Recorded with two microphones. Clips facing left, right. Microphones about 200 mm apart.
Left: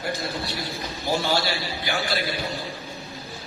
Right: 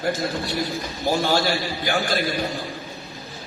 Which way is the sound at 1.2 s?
50° right (ahead or behind).